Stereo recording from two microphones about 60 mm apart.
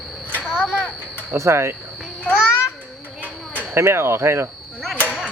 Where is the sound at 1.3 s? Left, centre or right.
Right.